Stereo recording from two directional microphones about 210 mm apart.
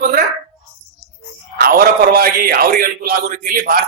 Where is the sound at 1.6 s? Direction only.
45° right (ahead or behind).